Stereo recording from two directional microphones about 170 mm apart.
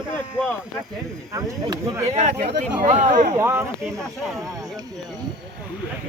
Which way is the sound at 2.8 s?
45° right (ahead or behind).